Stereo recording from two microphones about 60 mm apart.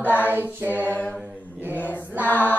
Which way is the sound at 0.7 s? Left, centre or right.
Left.